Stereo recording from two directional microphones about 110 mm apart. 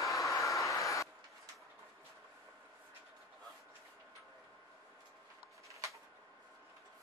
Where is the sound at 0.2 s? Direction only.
30° left (ahead or behind).